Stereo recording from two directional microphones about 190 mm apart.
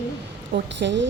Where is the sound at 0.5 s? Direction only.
70° right (ahead or behind).